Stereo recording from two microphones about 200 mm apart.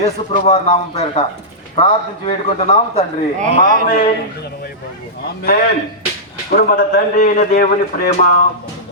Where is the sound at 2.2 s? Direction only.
30° left (ahead or behind).